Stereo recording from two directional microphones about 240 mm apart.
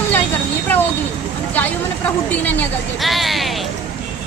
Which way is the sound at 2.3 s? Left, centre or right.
Centre.